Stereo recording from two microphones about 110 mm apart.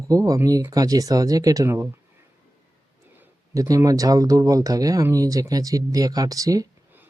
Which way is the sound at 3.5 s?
30° right (ahead or behind).